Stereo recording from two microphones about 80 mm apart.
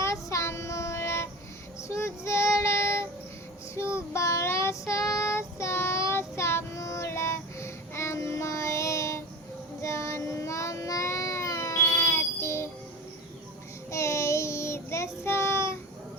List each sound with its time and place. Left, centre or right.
0.0 s child singing: left
13.9 s child singing: left